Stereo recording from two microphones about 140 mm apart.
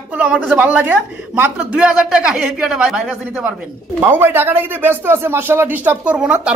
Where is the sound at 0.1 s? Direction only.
10° right (ahead or behind).